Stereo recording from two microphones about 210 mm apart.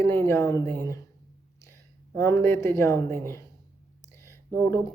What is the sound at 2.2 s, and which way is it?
Speech, 15° left (ahead or behind).